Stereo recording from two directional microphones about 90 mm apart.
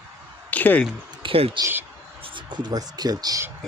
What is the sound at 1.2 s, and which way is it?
Speech, 90° right.